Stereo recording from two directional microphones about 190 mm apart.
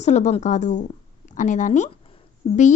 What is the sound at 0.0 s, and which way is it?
A woman's voice, 35° left (ahead or behind).